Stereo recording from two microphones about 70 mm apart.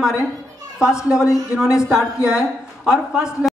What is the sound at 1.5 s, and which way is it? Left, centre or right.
Speech, centre.